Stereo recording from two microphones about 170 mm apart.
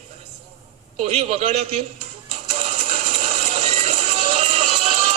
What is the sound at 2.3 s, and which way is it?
Music, 40° right (ahead or behind).